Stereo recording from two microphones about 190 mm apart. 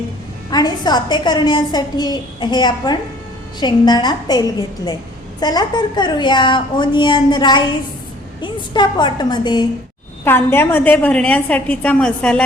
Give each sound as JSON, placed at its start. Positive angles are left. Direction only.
{"t": 0.5, "sound": "a woman's voice", "side_deg": 20}
{"t": 10.2, "sound": "a woman's voice", "side_deg": 10}